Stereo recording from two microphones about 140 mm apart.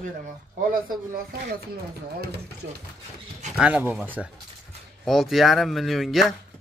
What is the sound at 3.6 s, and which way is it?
Speech, 10° right (ahead or behind).